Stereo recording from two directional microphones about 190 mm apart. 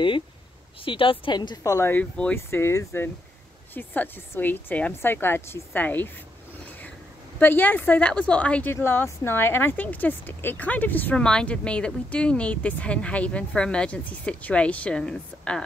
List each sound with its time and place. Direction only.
0.8 s a woman's voice: 30° left (ahead or behind); by 6.1 s 10° left (ahead or behind)
7.3 s a woman's voice: 10° left (ahead or behind)